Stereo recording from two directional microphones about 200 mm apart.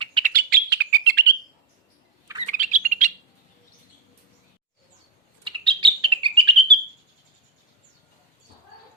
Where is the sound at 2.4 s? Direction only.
40° right (ahead or behind).